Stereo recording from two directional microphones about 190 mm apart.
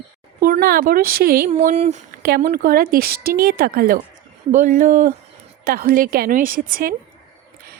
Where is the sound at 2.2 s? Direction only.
55° right (ahead or behind).